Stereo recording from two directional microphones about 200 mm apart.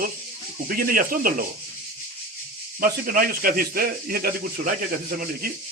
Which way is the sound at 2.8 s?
45° right (ahead or behind).